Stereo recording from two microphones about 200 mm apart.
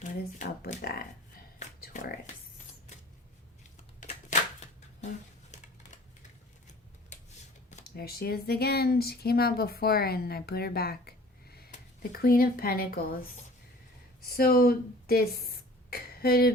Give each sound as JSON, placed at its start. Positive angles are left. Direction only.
{"t": 0.0, "sound": "speech", "side_deg": 40}
{"t": 1.5, "sound": "music", "side_deg": 40}
{"t": 4.0, "sound": "a sound", "side_deg": 35}
{"t": 7.9, "sound": "speech", "side_deg": 50}
{"t": 14.3, "sound": "speech", "side_deg": 50}
{"t": 15.9, "sound": "a sound", "side_deg": 50}